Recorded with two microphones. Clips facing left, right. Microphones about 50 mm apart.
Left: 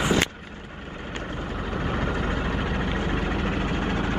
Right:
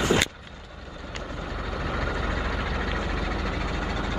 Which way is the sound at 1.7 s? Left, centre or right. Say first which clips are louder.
Left 2 dB; left.